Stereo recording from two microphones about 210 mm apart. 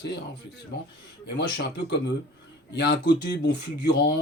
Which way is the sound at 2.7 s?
55° left (ahead or behind).